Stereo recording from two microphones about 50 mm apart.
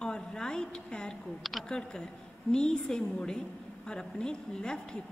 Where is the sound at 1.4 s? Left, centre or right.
Centre.